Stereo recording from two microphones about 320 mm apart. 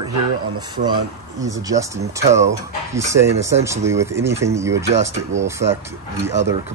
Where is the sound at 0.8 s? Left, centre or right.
Right.